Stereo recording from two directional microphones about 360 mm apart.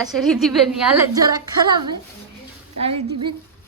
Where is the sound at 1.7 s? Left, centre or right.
Centre.